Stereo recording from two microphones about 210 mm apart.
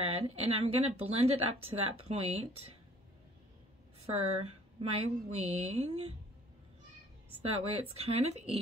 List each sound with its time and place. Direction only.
0.0 s speech: 30° right (ahead or behind)
4.7 s speech: 30° right (ahead or behind)
7.4 s speech: 30° right (ahead or behind)